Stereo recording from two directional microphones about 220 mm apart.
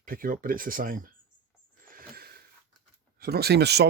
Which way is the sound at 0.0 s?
40° right (ahead or behind).